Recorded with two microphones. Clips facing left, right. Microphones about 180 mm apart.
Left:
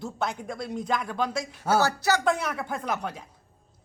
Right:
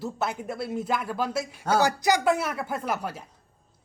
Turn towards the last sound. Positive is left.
turn(degrees=-5)  # may be behind; listen again after turning